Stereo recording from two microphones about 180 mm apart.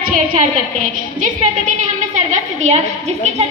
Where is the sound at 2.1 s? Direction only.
40° right (ahead or behind).